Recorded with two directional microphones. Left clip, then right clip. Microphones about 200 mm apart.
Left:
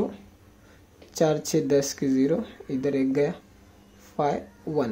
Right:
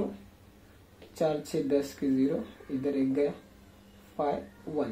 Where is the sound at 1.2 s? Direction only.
50° left (ahead or behind).